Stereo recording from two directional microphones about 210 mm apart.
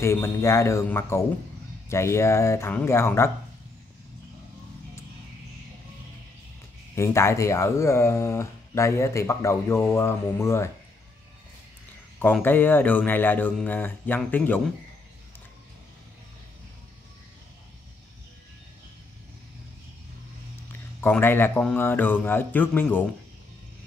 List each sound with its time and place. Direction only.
0.0 s speech: 15° left (ahead or behind)
7.0 s speech: 15° left (ahead or behind)
12.2 s speech: 10° left (ahead or behind)
21.0 s speech: 10° left (ahead or behind)